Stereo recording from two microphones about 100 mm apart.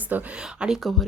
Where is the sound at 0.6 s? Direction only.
Centre (ahead or behind).